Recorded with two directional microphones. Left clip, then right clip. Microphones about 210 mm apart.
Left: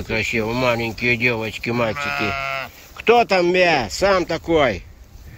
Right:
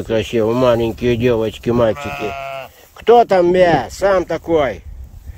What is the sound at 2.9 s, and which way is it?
Speech, 30° right (ahead or behind).